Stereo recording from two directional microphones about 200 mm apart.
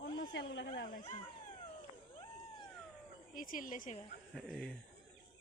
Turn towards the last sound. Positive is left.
turn(degrees=0)  # may be behind; listen again after turning